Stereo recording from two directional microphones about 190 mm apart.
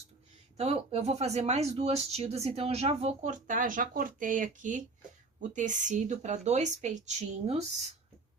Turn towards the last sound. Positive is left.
turn(degrees=-35)  # may be behind; listen again after turning